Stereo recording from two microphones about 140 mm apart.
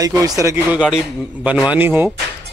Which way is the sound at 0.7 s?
5° right (ahead or behind).